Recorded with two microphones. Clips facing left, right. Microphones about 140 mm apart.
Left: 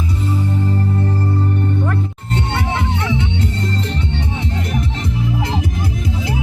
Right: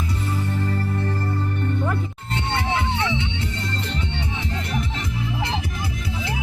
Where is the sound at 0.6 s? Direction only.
20° left (ahead or behind).